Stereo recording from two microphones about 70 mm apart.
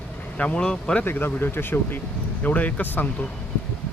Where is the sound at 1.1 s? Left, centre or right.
Left.